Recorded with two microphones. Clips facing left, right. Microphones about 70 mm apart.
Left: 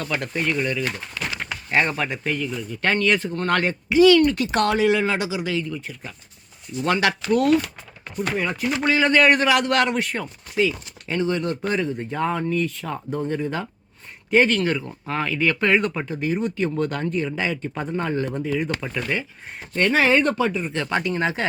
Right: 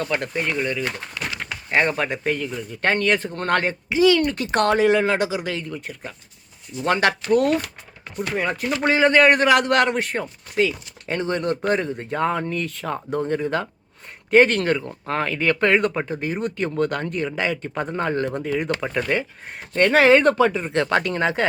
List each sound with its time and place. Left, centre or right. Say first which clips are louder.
0.0 s speech: right 2 dB; right
0.3 s speech: left 4 dB; centre
0.9 s crumpling: even; centre
1.7 s speech: right 2 dB; right
6.8 s speech: right 1 dB; right
8.8 s speech: right 2 dB; right
10.5 s speech: even; right